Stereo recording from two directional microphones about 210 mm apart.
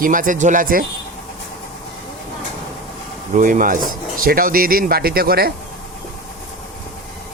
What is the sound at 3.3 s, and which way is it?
Speech, 40° right (ahead or behind).